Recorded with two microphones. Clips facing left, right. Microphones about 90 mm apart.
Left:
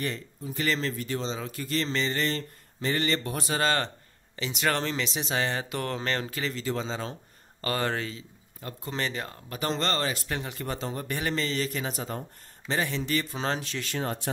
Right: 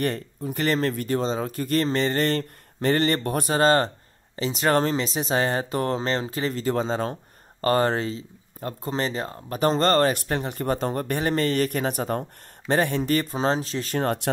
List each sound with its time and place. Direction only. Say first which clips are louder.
0.0 s speech: right 7 dB; 55° right (ahead or behind)
11.1 s speech: right 5 dB; 35° right (ahead or behind)
11.4 s speech: right 7 dB; 55° right (ahead or behind); by 13.9 s 35° right (ahead or behind)
13.9 s speech: right 7 dB; 65° right (ahead or behind)